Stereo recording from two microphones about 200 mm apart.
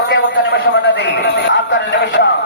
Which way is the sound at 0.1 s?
60° left (ahead or behind).